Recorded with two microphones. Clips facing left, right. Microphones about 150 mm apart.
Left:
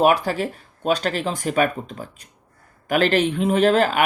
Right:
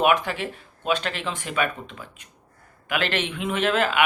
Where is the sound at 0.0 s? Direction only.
35° left (ahead or behind).